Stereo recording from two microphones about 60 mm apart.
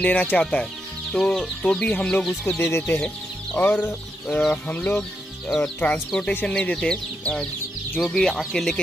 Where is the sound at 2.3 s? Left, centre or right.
Left.